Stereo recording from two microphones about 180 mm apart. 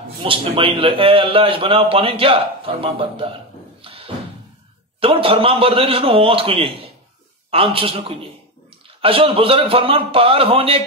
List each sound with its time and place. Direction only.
0.2 s a man's voice: 30° right (ahead or behind)
3.8 s a sound: 30° right (ahead or behind)
5.0 s a man's voice: 30° right (ahead or behind)